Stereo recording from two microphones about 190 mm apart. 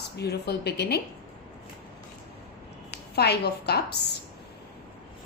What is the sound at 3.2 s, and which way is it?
Speech, 60° left (ahead or behind).